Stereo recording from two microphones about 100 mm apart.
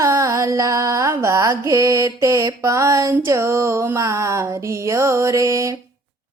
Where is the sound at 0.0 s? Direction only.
30° right (ahead or behind).